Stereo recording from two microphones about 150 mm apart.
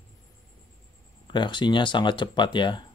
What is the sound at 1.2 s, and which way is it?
Speech, 30° left (ahead or behind).